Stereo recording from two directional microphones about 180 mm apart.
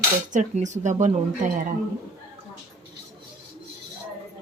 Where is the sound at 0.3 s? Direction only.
40° right (ahead or behind).